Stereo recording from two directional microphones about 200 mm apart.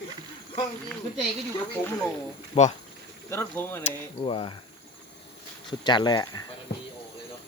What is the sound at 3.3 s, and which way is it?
Speech, 10° left (ahead or behind).